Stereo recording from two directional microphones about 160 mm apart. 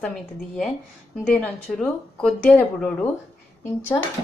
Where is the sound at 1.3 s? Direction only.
5° left (ahead or behind).